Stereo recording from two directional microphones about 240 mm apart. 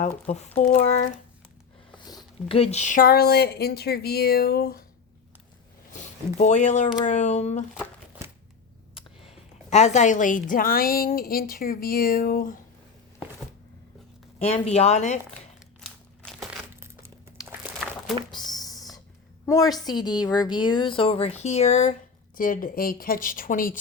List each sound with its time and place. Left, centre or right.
0.0 s speech: left
2.0 s speech: centre; by 4.9 s left
5.9 s speech: left
9.0 s a sound: left
10.5 s speech: left
14.3 s speech: left
15.8 s crumpling: centre
18.3 s a sound: centre
19.5 s a woman's voice: centre; by 23.7 s left